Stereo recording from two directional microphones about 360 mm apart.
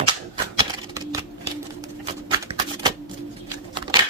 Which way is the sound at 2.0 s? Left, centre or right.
Centre.